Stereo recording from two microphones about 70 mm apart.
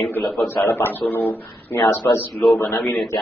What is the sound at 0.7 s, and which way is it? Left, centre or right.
A man's voice, left.